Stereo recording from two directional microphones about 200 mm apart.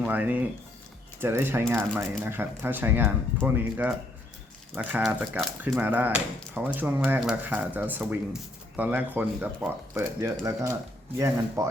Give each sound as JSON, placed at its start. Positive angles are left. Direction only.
{"t": 0.0, "sound": "speech", "side_deg": -10}